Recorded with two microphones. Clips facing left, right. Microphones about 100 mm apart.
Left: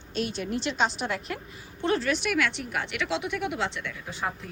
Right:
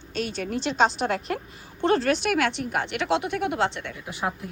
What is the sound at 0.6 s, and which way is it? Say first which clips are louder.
A woman's voice: right 7 dB; 35° right (ahead or behind).